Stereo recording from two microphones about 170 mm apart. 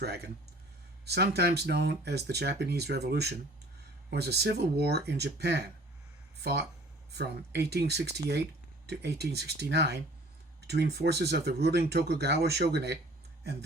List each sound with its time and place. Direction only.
0.0 s speech: 70° right (ahead or behind)